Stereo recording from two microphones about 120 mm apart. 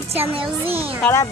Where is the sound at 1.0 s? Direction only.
25° left (ahead or behind).